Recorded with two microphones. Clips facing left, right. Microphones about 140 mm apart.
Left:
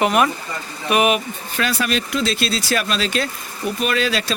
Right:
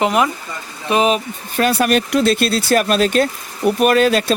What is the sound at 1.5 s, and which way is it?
Speech, 50° right (ahead or behind).